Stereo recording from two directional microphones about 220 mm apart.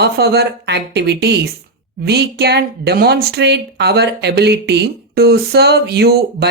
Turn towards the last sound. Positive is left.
turn(degrees=-45)  # may be behind; listen again after turning